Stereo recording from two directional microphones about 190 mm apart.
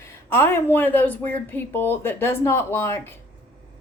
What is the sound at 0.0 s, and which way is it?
A woman's voice, 10° left (ahead or behind).